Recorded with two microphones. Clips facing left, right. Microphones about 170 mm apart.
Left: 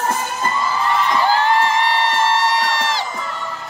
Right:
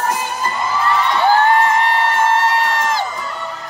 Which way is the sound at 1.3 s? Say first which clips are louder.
Right 6 dB; 50° right (ahead or behind).